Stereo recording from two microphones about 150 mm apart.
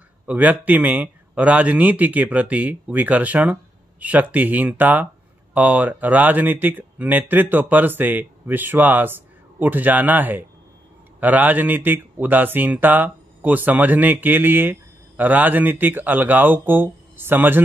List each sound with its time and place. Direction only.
0.3 s speech: 10° right (ahead or behind)